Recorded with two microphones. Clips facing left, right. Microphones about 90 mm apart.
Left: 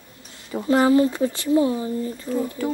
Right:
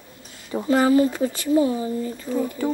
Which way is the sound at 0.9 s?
20° right (ahead or behind).